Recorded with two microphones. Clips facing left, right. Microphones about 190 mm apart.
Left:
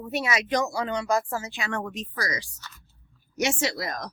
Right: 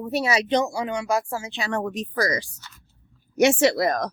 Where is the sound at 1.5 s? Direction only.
35° right (ahead or behind).